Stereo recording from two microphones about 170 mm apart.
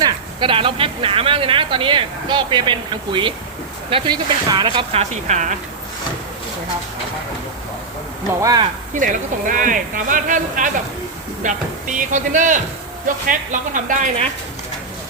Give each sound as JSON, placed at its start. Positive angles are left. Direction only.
{"t": 0.0, "sound": "speech", "side_deg": -30}
{"t": 8.3, "sound": "speech", "side_deg": -20}
{"t": 8.9, "sound": "speech", "side_deg": -50}